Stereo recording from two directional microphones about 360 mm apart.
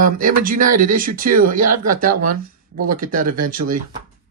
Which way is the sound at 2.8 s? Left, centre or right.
Right.